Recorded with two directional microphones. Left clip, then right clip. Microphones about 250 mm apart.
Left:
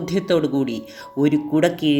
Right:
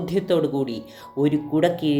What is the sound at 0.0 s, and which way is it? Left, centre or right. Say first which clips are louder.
Speech: left 1 dB; left.